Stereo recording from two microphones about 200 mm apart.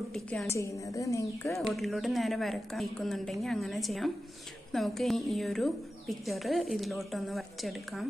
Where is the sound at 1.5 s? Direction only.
Centre (ahead or behind).